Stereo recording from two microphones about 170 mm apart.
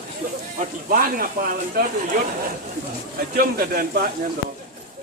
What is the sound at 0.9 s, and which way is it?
Speech, 55° right (ahead or behind).